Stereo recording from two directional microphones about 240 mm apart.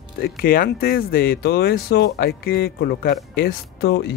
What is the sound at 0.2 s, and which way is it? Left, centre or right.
Speech, left.